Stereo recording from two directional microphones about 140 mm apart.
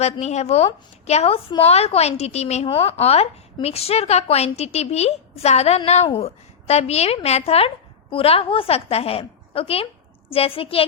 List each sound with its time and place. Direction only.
0.0 s a woman's voice: 50° left (ahead or behind)